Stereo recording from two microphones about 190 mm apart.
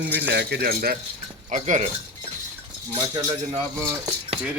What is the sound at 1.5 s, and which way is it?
Speech, 40° right (ahead or behind).